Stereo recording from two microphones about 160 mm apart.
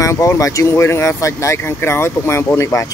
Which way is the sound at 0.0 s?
20° left (ahead or behind).